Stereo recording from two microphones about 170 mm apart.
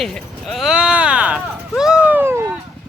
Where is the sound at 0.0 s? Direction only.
Centre (ahead or behind).